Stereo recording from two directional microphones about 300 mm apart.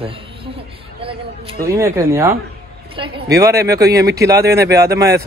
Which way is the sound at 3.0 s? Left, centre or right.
Centre.